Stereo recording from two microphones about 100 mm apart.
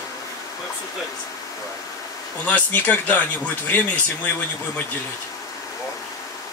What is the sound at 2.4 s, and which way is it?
Speech, 15° left (ahead or behind).